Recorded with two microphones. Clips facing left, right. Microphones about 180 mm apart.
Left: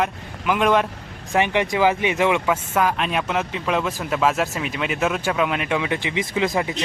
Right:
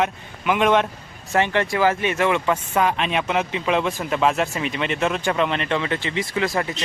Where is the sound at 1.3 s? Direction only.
15° left (ahead or behind).